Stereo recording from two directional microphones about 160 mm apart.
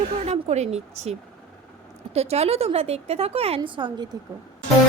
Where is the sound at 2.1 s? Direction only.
40° right (ahead or behind).